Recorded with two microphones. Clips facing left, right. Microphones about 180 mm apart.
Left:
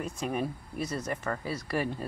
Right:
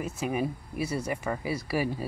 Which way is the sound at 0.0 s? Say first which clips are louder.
Right 2 dB; 5° right (ahead or behind).